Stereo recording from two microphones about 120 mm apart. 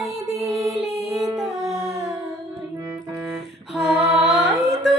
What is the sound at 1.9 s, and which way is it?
Music, 30° right (ahead or behind).